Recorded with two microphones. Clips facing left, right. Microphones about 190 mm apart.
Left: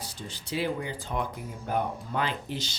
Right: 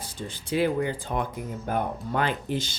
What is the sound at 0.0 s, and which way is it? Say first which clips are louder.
Speech: right 4 dB; 50° right (ahead or behind).